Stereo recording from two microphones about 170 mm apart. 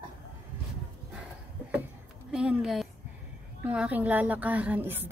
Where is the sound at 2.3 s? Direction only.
5° right (ahead or behind).